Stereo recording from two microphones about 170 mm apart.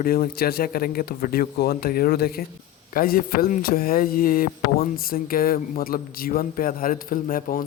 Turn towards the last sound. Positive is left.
turn(degrees=55)  # may be behind; listen again after turning